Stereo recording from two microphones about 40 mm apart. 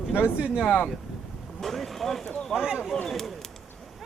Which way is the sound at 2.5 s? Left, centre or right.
Centre.